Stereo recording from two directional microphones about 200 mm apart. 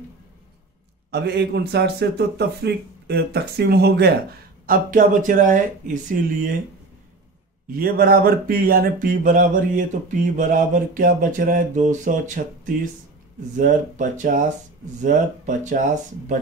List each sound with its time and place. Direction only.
1.1 s a man's voice: 55° right (ahead or behind)
4.6 s speech: 45° right (ahead or behind)
7.7 s speech: 45° right (ahead or behind)
13.6 s speech: 40° right (ahead or behind)